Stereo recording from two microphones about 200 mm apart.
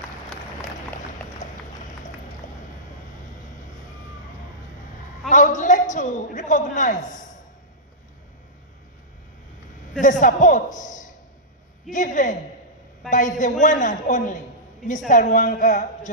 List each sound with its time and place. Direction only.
1.4 s clip-clop: 40° left (ahead or behind)
5.3 s a man's voice: 40° left (ahead or behind)
10.0 s a man's voice: 40° left (ahead or behind)